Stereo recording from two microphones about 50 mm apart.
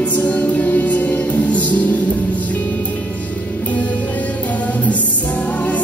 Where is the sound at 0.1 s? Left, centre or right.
Left.